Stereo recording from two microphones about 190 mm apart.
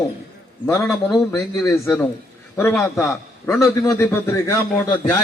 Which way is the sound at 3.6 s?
15° left (ahead or behind).